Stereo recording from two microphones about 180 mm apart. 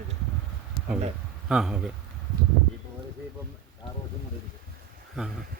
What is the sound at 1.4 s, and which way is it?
Speech, 5° right (ahead or behind).